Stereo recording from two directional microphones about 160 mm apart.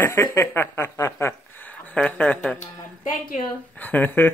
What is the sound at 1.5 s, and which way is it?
Speech, 10° left (ahead or behind).